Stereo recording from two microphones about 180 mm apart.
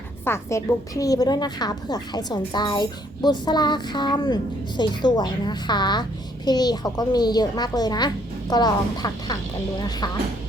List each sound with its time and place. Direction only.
0.3 s a child's voice: 15° left (ahead or behind)